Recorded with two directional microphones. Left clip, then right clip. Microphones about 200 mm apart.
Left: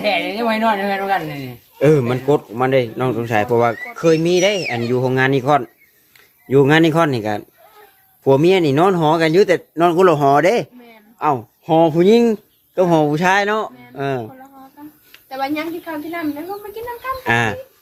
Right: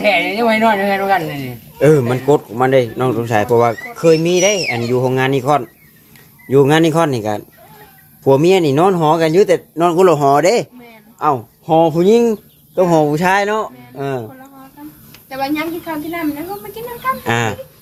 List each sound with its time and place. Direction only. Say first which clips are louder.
0.0 s speech: right 5 dB; 10° right (ahead or behind)
1.8 s speech: right 3 dB; 10° left (ahead or behind)
15.3 s a woman's voice: right 3 dB; 20° left (ahead or behind)
17.2 s speech: left 4 dB; 10° left (ahead or behind)